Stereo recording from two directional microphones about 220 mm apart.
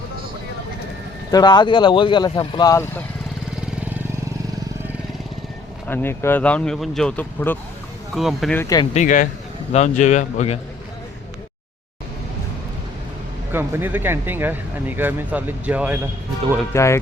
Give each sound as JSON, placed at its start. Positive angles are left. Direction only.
{"t": 1.3, "sound": "speech", "side_deg": 20}
{"t": 5.9, "sound": "speech", "side_deg": 10}
{"t": 8.6, "sound": "speech", "side_deg": 15}
{"t": 8.9, "sound": "a man's voice", "side_deg": 35}
{"t": 13.5, "sound": "speech", "side_deg": -10}
{"t": 16.7, "sound": "speech", "side_deg": 15}